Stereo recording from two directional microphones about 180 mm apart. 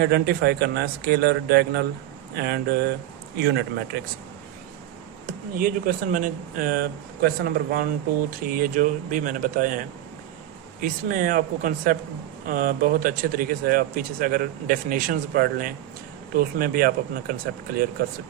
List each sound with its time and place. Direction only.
0.0 s a man's voice: 65° right (ahead or behind)
5.2 s speech: 50° right (ahead or behind)
10.8 s a man's voice: 50° right (ahead or behind)